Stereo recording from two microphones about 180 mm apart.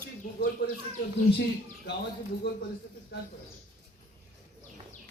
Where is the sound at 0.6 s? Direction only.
55° left (ahead or behind).